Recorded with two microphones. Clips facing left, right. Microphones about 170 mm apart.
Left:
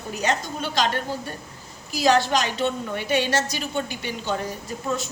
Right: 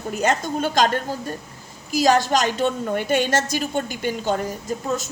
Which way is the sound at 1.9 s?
45° right (ahead or behind).